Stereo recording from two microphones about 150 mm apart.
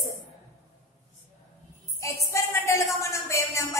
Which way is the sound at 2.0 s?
20° left (ahead or behind).